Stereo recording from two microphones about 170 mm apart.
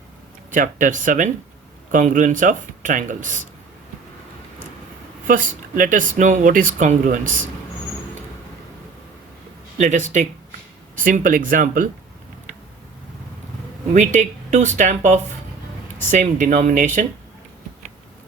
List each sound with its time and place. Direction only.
0.5 s speech: 50° right (ahead or behind)
5.3 s speech: 50° right (ahead or behind)
9.7 s speech: 45° right (ahead or behind)
13.9 s speech: 45° right (ahead or behind)